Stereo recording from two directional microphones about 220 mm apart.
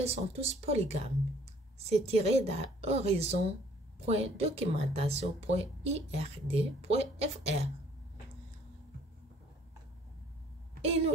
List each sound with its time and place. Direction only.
0.0 s speech: 25° right (ahead or behind)